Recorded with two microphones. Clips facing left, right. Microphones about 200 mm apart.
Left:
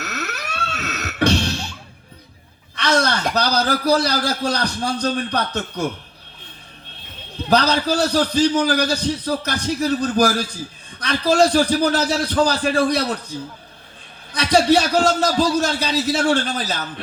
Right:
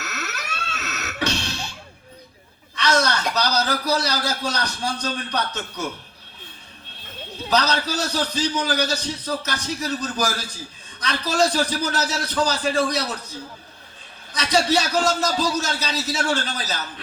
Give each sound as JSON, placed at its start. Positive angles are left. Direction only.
{"t": 0.0, "sound": "a sound", "side_deg": 60}
{"t": 0.7, "sound": "beatboxing", "side_deg": 55}
{"t": 3.0, "sound": "speech", "side_deg": 55}
{"t": 7.5, "sound": "speech", "side_deg": 55}
{"t": 14.3, "sound": "speech", "side_deg": 55}